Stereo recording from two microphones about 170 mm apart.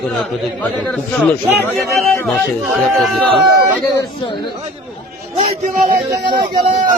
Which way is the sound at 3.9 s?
25° left (ahead or behind).